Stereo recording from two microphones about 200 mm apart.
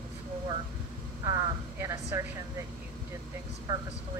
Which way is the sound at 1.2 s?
20° right (ahead or behind).